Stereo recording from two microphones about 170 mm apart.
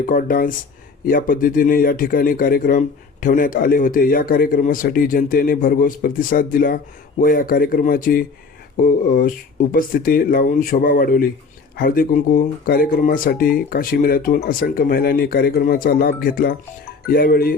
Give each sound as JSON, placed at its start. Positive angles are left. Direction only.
{"t": 0.0, "sound": "speech", "side_deg": 55}